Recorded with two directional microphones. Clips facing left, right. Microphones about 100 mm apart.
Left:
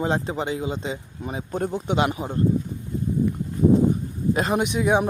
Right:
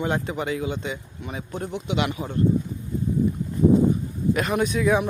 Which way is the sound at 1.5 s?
45° left (ahead or behind).